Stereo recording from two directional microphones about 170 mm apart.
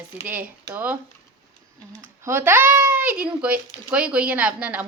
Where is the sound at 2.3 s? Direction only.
15° right (ahead or behind).